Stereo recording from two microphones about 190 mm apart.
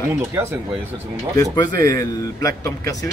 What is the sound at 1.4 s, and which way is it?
A man's voice, 20° left (ahead or behind).